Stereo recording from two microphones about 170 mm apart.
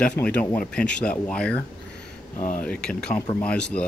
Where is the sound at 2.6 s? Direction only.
5° left (ahead or behind).